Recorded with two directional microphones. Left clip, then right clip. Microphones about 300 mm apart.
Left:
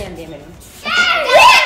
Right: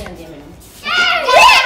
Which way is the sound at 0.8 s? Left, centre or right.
Centre.